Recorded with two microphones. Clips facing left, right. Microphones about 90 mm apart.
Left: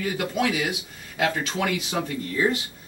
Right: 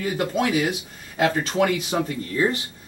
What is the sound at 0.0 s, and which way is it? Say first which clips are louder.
Speech: right 2 dB; 35° right (ahead or behind).